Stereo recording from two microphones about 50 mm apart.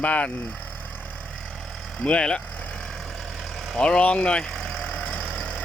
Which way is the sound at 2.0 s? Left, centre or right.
Left.